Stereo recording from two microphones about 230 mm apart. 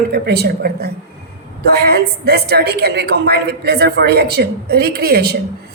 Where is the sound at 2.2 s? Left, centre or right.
Right.